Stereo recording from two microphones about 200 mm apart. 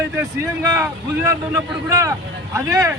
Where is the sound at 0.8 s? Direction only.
15° right (ahead or behind).